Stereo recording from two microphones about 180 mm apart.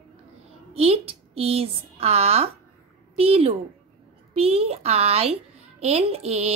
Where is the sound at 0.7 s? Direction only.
35° right (ahead or behind).